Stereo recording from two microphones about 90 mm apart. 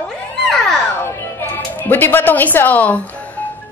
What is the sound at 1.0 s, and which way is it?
Speech, 25° left (ahead or behind).